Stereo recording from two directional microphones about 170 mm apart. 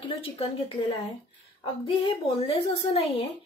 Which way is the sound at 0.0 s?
35° left (ahead or behind).